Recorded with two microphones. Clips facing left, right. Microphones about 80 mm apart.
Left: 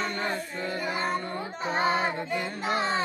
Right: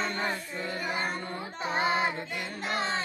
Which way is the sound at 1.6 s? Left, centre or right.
Left.